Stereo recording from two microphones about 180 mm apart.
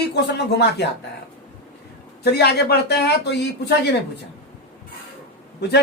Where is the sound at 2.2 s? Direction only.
65° left (ahead or behind).